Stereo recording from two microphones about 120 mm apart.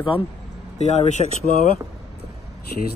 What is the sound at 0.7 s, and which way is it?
Speech, 70° left (ahead or behind).